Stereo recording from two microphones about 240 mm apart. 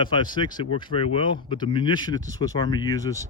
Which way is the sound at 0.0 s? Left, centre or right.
Centre.